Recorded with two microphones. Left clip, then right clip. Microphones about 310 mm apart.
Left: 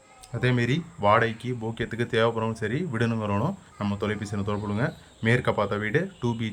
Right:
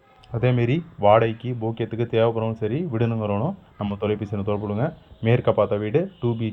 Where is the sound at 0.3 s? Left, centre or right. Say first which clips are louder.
Right 3 dB; centre.